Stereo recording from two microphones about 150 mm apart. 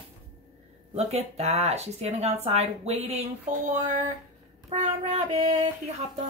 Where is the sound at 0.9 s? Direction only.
45° right (ahead or behind).